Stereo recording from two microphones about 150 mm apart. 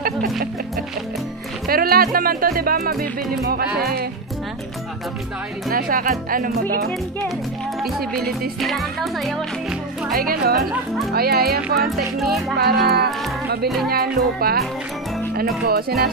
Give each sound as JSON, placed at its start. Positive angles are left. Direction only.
{"t": 1.7, "sound": "music", "side_deg": -85}
{"t": 5.7, "sound": "speech", "side_deg": -70}
{"t": 8.2, "sound": "music", "side_deg": 0}
{"t": 10.1, "sound": "speech", "side_deg": -80}